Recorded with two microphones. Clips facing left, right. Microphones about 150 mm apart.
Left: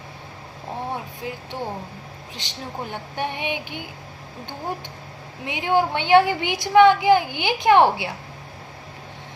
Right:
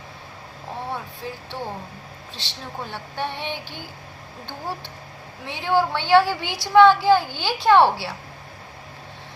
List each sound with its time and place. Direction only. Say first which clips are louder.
0.9 s a sound: left 1 dB; 15° left (ahead or behind)
2.3 s a woman's voice: left 2 dB; 15° left (ahead or behind)
5.5 s a woman's voice: left 1 dB; 20° left (ahead or behind)